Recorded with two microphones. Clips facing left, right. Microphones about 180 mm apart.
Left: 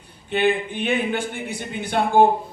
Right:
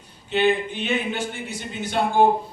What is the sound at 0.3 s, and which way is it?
A man's voice, 55° left (ahead or behind).